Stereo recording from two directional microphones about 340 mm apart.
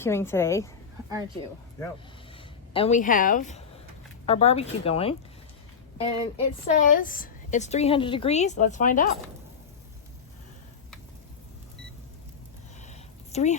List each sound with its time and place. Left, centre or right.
0.0 s speech: centre
2.3 s a woman's voice: centre
12.8 s a sound: centre